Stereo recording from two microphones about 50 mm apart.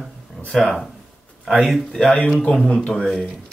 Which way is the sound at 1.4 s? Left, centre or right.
Centre.